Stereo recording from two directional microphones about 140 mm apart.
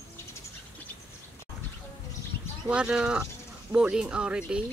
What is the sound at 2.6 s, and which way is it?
Speech, 5° right (ahead or behind).